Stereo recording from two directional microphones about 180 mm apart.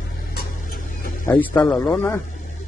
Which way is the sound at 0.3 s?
55° left (ahead or behind).